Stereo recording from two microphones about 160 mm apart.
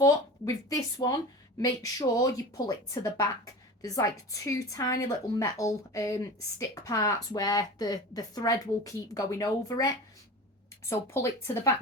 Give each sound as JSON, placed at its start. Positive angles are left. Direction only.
{"t": 0.0, "sound": "a woman's voice", "side_deg": 20}